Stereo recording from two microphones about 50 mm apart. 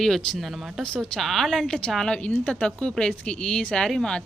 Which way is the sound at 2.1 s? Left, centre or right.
Left.